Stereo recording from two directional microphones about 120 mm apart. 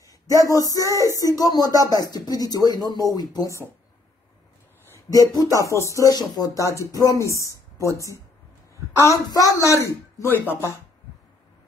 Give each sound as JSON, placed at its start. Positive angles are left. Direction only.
{"t": 0.3, "sound": "speech", "side_deg": 30}
{"t": 4.9, "sound": "a woman's voice", "side_deg": 30}
{"t": 8.9, "sound": "speech", "side_deg": 25}